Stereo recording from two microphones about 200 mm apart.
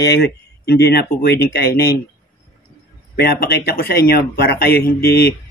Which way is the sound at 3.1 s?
50° left (ahead or behind).